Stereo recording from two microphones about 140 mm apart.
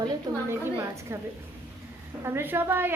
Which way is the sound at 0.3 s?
30° right (ahead or behind).